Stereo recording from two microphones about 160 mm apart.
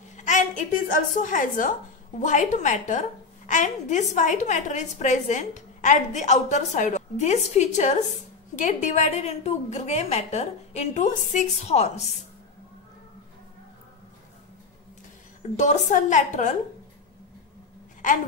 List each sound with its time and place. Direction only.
0.1 s a woman's voice: 50° left (ahead or behind)
15.5 s a woman's voice: 45° left (ahead or behind)